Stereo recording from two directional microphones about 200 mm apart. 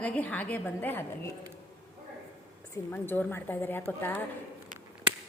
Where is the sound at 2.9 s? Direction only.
10° left (ahead or behind).